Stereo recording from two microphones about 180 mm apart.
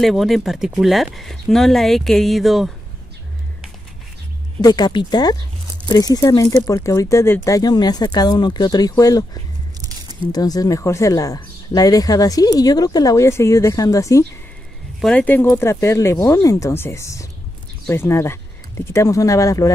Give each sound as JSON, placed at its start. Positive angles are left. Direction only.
{"t": 0.0, "sound": "speech", "side_deg": 0}
{"t": 4.6, "sound": "speech", "side_deg": 20}
{"t": 9.8, "sound": "squish", "side_deg": -20}
{"t": 10.3, "sound": "speech", "side_deg": 20}
{"t": 15.0, "sound": "speech", "side_deg": 5}